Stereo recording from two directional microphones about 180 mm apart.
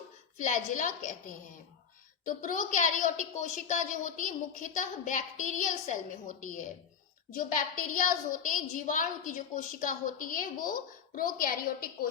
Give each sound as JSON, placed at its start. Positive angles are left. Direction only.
{"t": 0.3, "sound": "a woman's voice", "side_deg": 45}
{"t": 2.2, "sound": "a woman's voice", "side_deg": 50}